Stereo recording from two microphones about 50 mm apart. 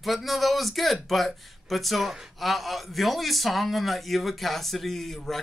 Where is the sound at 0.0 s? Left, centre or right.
Centre.